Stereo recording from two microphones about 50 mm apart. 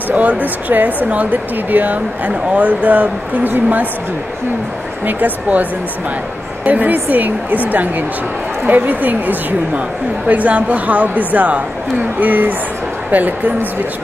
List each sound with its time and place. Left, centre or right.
0.1 s a woman's voice: right
5.0 s a woman's voice: right